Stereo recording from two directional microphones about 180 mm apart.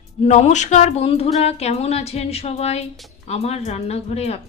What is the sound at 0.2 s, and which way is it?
Speech, 40° left (ahead or behind).